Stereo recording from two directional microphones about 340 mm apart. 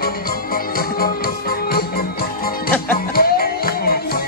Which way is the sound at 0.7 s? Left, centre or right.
Left.